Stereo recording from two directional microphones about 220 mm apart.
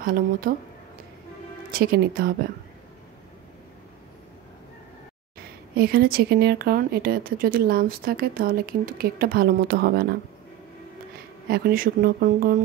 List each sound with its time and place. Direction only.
0.0 s speech: 40° right (ahead or behind)
1.7 s speech: 40° right (ahead or behind)
5.8 s speech: 45° right (ahead or behind)
11.4 s speech: 45° right (ahead or behind)